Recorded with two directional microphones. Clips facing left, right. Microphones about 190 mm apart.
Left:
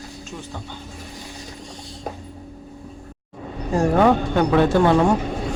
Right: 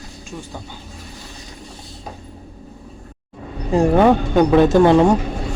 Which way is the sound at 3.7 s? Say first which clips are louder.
Right 3 dB; 15° right (ahead or behind).